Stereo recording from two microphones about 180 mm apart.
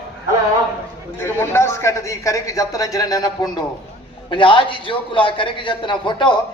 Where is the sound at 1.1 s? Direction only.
15° left (ahead or behind).